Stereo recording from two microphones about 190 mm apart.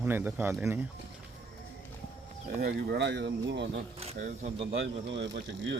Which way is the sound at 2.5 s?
55° right (ahead or behind).